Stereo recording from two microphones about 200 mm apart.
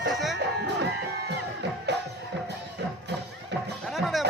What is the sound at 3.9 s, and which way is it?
Music, centre (ahead or behind).